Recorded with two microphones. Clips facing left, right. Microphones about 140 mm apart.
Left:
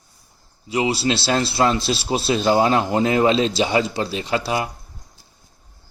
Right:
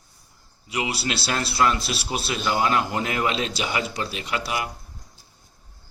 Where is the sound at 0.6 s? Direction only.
30° left (ahead or behind).